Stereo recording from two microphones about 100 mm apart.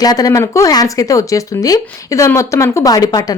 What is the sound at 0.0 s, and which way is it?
Speech, 40° left (ahead or behind).